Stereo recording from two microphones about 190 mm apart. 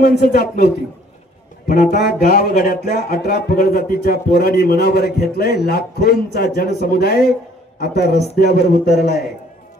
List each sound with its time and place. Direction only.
0.0 s speech: 55° left (ahead or behind)
1.7 s speech: 50° left (ahead or behind)